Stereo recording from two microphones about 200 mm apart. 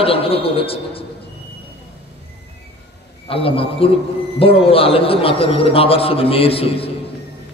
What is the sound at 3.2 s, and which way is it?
A man's voice, 30° left (ahead or behind).